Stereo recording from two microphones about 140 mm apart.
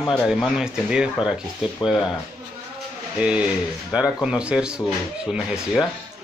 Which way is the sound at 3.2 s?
5° right (ahead or behind).